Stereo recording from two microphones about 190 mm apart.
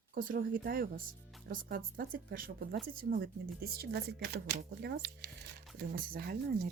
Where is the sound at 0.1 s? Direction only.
45° right (ahead or behind).